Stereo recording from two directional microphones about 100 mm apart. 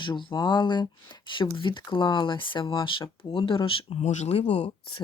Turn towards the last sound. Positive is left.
turn(degrees=65)  # may be behind; listen again after turning